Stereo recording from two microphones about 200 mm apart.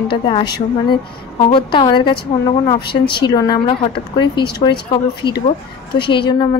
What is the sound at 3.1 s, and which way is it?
A woman's voice, 20° left (ahead or behind).